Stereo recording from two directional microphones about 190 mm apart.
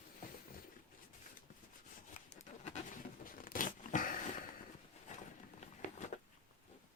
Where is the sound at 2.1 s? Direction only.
40° left (ahead or behind).